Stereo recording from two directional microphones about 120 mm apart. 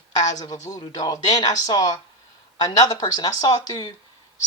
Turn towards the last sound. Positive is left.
turn(degrees=35)  # may be behind; listen again after turning